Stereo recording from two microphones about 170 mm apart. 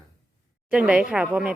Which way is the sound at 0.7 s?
5° right (ahead or behind).